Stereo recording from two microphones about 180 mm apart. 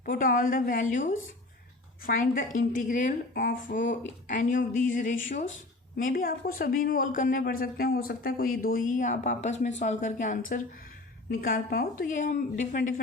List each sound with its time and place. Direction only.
0.0 s speech: 50° left (ahead or behind)